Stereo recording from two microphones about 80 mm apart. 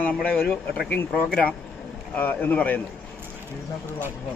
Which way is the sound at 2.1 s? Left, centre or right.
Left.